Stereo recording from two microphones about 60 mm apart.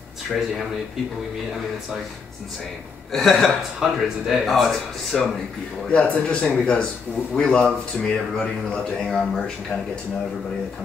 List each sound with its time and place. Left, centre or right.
3.1 s speech: centre
5.9 s speech: centre